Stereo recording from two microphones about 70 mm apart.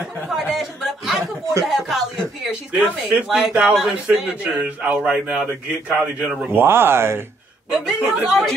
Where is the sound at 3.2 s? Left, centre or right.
Centre.